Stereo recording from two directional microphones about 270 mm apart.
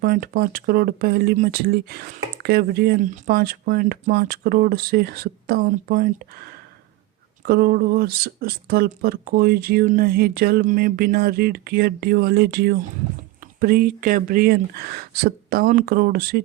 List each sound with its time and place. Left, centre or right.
0.0 s speech: right